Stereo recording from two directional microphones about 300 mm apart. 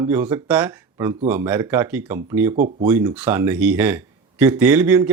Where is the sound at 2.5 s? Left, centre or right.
Right.